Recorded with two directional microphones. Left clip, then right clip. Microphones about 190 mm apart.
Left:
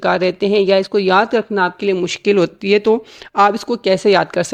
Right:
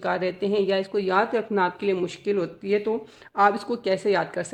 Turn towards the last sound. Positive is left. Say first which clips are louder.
# left 10 dB
turn(degrees=40)  # may be behind; listen again after turning